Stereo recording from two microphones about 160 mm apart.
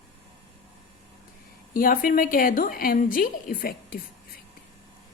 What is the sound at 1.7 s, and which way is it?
A woman's voice, 60° left (ahead or behind).